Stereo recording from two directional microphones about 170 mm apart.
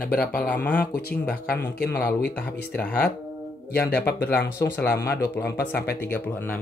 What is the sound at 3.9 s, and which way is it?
Speech, 65° left (ahead or behind).